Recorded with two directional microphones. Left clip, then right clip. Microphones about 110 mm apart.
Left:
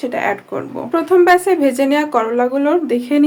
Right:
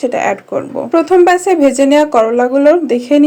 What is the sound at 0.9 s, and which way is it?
Speech, 35° right (ahead or behind).